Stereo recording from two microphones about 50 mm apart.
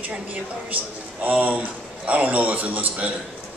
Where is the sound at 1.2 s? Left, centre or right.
Right.